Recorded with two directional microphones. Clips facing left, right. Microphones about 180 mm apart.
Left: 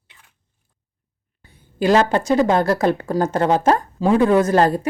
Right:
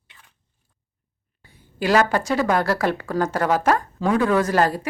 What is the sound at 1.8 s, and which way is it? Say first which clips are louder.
A woman's voice: left 3 dB; 25° left (ahead or behind).